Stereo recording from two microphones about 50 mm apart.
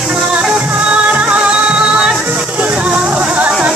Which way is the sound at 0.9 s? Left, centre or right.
Right.